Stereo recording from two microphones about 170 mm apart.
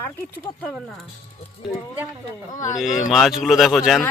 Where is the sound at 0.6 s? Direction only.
Centre (ahead or behind).